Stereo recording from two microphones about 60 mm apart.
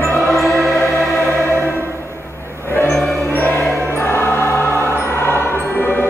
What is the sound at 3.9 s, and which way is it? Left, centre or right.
Choir, left.